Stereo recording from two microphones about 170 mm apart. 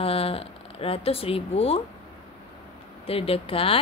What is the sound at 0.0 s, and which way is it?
Speech, 35° left (ahead or behind).